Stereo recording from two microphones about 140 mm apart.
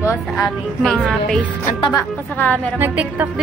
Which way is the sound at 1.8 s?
35° left (ahead or behind).